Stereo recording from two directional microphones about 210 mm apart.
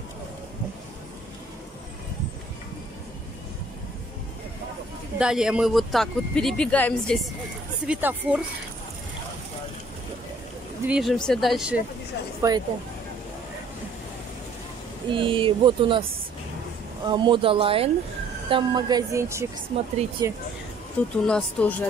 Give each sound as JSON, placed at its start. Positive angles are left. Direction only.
{"t": 5.2, "sound": "speech", "side_deg": -5}
{"t": 7.8, "sound": "speech", "side_deg": -5}
{"t": 10.9, "sound": "speech", "side_deg": 0}
{"t": 12.4, "sound": "speech", "side_deg": -15}
{"t": 15.0, "sound": "speech", "side_deg": -25}
{"t": 17.0, "sound": "speech", "side_deg": -20}
{"t": 21.0, "sound": "speech", "side_deg": 5}